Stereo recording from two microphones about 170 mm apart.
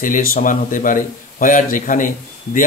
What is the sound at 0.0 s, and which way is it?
A man's voice, 55° left (ahead or behind).